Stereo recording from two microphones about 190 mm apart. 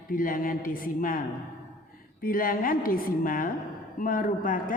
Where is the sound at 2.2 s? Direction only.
50° left (ahead or behind).